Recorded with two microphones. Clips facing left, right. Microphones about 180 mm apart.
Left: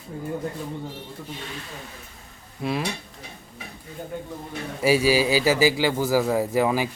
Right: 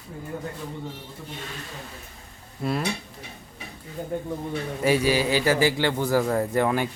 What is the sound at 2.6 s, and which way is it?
Speech, centre (ahead or behind).